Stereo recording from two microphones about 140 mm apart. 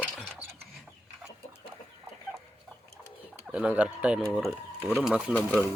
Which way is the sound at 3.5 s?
10° right (ahead or behind).